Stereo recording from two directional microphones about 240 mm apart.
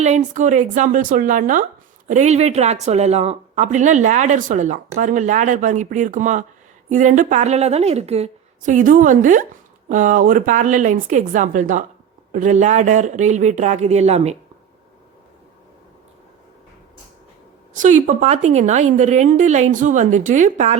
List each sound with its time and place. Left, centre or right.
0.0 s a woman's voice: right
17.7 s a woman's voice: right